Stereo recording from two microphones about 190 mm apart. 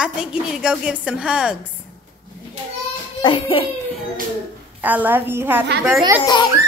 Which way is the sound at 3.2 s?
30° left (ahead or behind).